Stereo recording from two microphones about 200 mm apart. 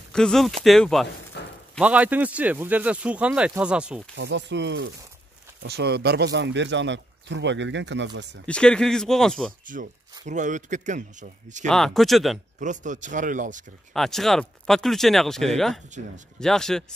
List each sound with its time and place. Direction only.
0.1 s speech: centre (ahead or behind)
1.4 s a sound: 60° left (ahead or behind)
1.8 s speech: 5° right (ahead or behind)
4.2 s speech: 60° right (ahead or behind)
8.5 s speech: 5° left (ahead or behind)
9.7 s speech: 45° right (ahead or behind)
11.6 s speech: centre (ahead or behind)
12.5 s speech: 40° right (ahead or behind)
13.9 s speech: centre (ahead or behind)